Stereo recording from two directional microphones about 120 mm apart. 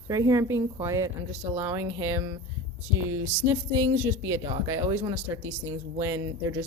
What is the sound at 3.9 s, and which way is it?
Speech, 20° right (ahead or behind).